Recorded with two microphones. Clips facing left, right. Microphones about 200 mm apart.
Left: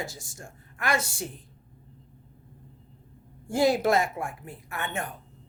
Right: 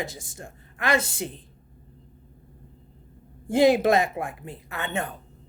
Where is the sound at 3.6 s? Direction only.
90° right.